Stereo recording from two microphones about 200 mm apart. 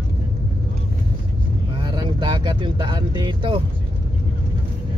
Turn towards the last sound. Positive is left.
turn(degrees=-25)  # may be behind; listen again after turning